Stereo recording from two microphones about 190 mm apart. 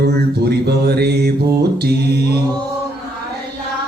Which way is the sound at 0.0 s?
60° right (ahead or behind).